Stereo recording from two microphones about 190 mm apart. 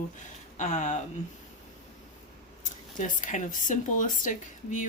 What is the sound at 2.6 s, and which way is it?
Speech, 45° left (ahead or behind).